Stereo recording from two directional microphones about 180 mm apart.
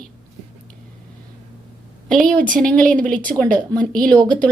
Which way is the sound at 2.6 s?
5° left (ahead or behind).